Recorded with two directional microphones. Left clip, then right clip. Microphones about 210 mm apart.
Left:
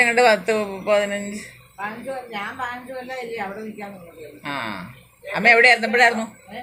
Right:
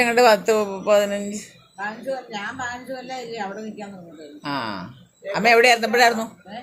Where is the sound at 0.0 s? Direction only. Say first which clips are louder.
Even; 20° right (ahead or behind).